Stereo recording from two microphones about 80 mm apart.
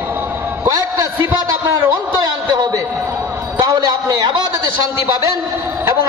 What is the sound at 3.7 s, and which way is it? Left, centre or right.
Speech, right.